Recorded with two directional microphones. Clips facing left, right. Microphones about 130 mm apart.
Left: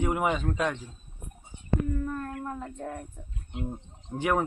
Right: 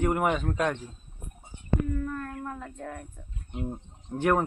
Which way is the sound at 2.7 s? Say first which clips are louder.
Left 2 dB; 25° left (ahead or behind).